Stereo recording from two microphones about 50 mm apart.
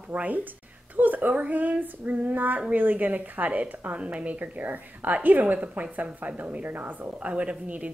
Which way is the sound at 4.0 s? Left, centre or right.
Right.